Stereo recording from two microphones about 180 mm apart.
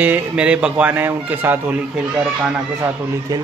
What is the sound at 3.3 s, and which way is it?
Speech, 20° right (ahead or behind).